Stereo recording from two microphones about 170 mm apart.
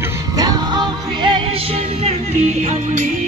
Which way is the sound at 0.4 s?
25° right (ahead or behind).